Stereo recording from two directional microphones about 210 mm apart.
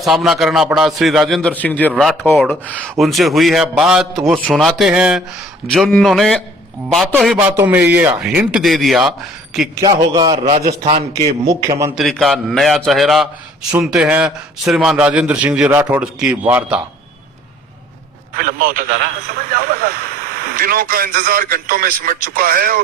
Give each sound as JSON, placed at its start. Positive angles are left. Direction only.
{"t": 0.0, "sound": "a man's voice", "side_deg": 0}
{"t": 9.8, "sound": "a man's voice", "side_deg": -20}
{"t": 10.7, "sound": "a man's voice", "side_deg": -30}
{"t": 11.9, "sound": "a man's voice", "side_deg": 0}
{"t": 18.3, "sound": "a man's voice", "side_deg": -40}